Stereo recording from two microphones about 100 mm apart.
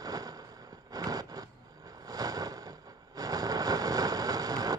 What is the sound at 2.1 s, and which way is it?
Vehicle, 40° right (ahead or behind).